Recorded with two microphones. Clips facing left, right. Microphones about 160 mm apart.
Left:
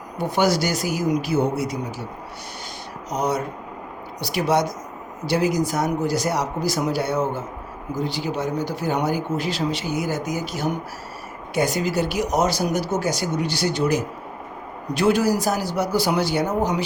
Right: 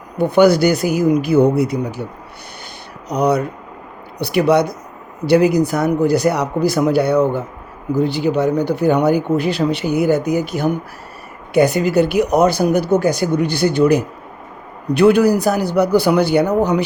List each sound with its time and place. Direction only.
0.3 s speech: 60° right (ahead or behind)
3.1 s speech: 65° right (ahead or behind)